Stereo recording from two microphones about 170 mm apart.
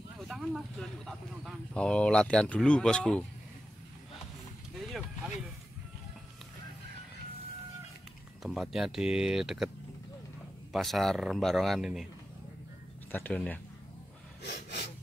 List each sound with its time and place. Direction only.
0.2 s speech: centre (ahead or behind)
4.7 s vehicle: centre (ahead or behind)
8.4 s speech: centre (ahead or behind)
10.7 s speech: centre (ahead or behind)
13.1 s speech: 10° left (ahead or behind)
14.4 s snort: 80° left